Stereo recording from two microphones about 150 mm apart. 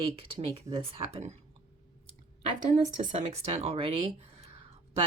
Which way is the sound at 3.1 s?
50° right (ahead or behind).